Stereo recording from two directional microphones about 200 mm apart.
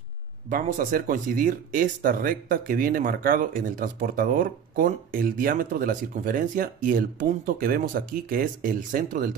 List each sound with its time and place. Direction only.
0.5 s speech: 40° right (ahead or behind)